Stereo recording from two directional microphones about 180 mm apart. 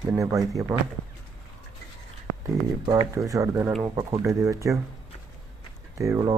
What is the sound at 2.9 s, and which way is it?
Speech, 20° right (ahead or behind).